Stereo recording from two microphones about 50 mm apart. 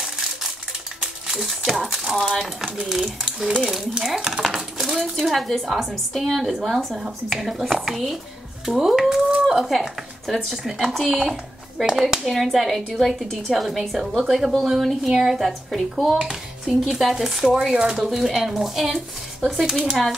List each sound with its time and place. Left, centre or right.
1.2 s a woman's voice: centre
9.3 s a sound: centre
9.7 s a woman's voice: centre
12.3 s a woman's voice: centre
16.2 s a sound: centre
16.8 s a woman's voice: centre